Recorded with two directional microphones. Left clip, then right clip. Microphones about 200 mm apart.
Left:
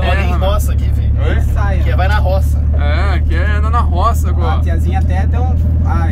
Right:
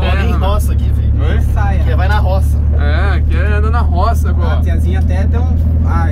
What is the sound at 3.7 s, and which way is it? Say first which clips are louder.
Vehicle: left 3 dB; 25° left (ahead or behind).